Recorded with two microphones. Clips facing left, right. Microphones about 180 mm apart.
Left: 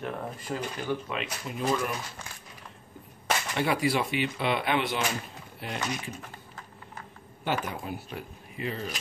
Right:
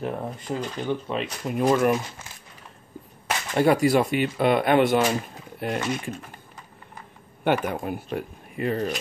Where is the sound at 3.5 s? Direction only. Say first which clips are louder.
Right 9 dB; 45° right (ahead or behind).